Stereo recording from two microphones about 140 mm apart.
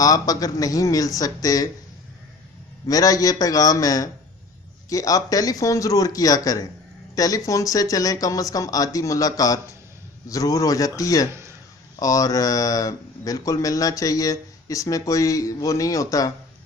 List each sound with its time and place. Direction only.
0.0 s speech: 25° left (ahead or behind)
2.8 s speech: 25° left (ahead or behind)